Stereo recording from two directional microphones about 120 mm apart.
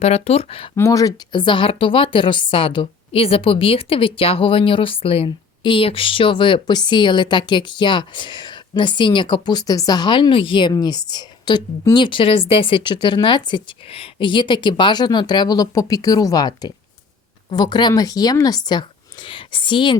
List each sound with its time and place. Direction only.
0.0 s speech: 60° left (ahead or behind)
0.8 s a woman's voice: 25° left (ahead or behind)